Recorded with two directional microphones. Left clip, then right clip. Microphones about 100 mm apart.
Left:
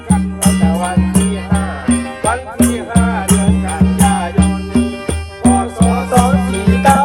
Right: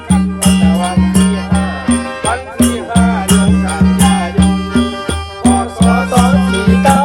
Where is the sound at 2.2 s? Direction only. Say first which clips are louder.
Even; 5° left (ahead or behind).